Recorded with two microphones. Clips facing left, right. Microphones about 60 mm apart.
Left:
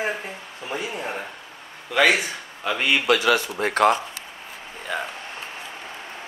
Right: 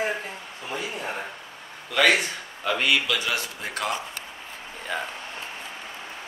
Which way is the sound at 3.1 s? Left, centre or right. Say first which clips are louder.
Left 8 dB; left.